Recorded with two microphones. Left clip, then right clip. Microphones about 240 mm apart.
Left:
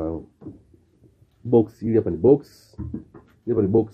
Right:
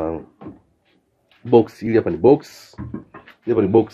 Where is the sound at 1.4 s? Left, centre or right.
Centre.